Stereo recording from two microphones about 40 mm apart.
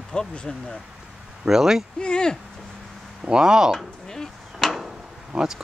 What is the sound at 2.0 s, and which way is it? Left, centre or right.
Speech, left.